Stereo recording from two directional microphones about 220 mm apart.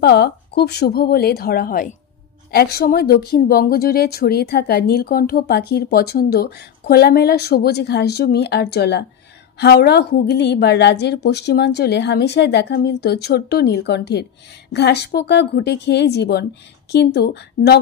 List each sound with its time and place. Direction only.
0.0 s speech: 50° left (ahead or behind)